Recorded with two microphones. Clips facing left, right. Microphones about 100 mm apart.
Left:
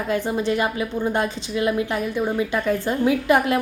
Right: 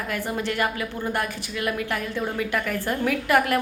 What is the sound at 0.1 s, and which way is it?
A woman's voice, 20° left (ahead or behind).